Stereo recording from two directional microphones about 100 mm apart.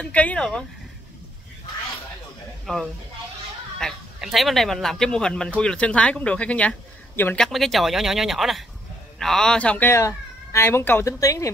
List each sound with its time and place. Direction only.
0.0 s speech: 15° left (ahead or behind)
2.6 s speech: centre (ahead or behind)
9.9 s speech: 30° left (ahead or behind)
11.1 s speech: 35° left (ahead or behind)